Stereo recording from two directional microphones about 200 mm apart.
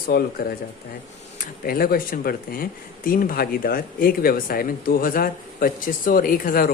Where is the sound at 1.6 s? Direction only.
45° left (ahead or behind).